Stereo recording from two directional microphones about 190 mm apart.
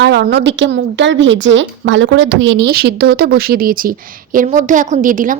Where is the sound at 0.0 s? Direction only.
60° right (ahead or behind).